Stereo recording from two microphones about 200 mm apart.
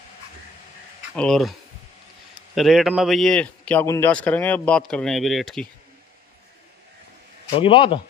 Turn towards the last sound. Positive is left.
turn(degrees=25)  # may be behind; listen again after turning